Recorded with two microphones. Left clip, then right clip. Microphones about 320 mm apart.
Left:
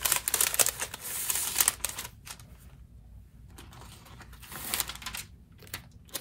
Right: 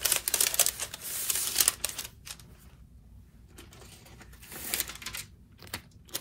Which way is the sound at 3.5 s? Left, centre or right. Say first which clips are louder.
Left 1 dB; centre.